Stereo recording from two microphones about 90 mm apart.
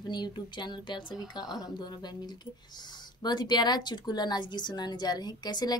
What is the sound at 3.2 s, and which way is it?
A woman's voice, 55° left (ahead or behind).